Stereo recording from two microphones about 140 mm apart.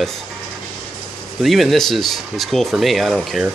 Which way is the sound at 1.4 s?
Centre (ahead or behind).